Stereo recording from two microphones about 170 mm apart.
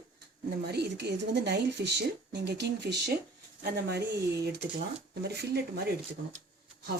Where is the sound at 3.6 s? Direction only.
75° right (ahead or behind).